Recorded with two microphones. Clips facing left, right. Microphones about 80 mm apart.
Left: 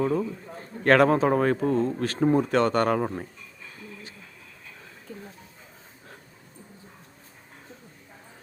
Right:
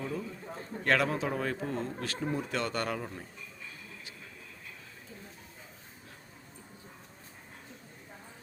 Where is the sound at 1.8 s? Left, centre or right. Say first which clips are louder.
Left 11 dB; left.